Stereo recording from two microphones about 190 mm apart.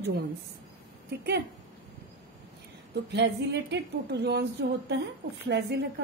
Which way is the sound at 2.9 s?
60° right (ahead or behind).